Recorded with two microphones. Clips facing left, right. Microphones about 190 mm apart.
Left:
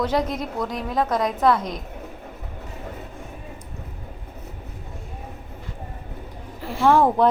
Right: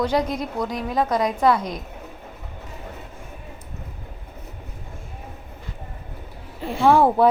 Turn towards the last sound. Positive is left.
turn(degrees=-10)  # may be behind; listen again after turning